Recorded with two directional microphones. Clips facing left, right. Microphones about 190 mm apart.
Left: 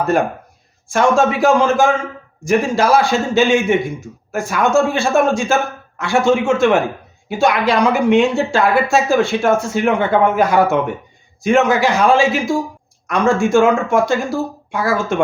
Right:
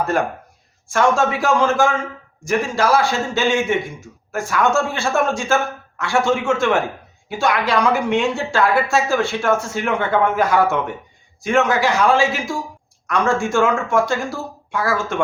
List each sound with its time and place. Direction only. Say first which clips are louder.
0.9 s speech: left 3 dB; 15° left (ahead or behind)